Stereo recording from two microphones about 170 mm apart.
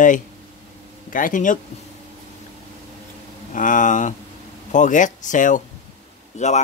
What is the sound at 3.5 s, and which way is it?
Speech, 50° left (ahead or behind).